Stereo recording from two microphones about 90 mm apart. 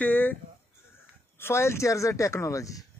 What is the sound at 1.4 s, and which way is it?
Speech, 30° left (ahead or behind).